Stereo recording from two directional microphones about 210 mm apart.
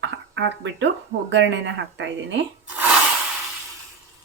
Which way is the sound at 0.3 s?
60° right (ahead or behind).